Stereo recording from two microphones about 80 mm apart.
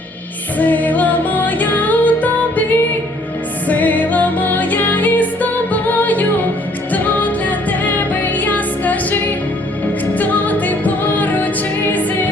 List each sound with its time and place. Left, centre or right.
0.6 s music: left
10.2 s music: left